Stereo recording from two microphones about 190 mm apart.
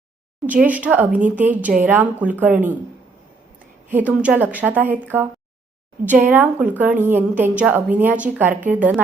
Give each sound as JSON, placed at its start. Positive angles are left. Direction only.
{"t": 0.4, "sound": "a woman's voice", "side_deg": -10}
{"t": 3.8, "sound": "a woman's voice", "side_deg": -10}
{"t": 6.1, "sound": "a woman's voice", "side_deg": -10}